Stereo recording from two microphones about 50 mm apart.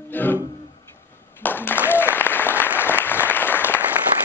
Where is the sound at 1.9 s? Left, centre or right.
Left.